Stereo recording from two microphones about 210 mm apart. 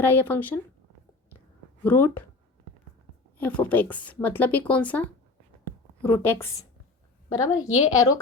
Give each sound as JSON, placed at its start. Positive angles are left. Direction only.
{"t": 0.0, "sound": "speech", "side_deg": 10}
{"t": 1.8, "sound": "speech", "side_deg": 10}
{"t": 3.3, "sound": "speech", "side_deg": 10}
{"t": 7.5, "sound": "speech", "side_deg": 15}